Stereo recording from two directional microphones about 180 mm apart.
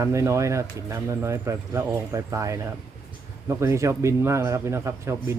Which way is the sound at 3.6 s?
15° right (ahead or behind).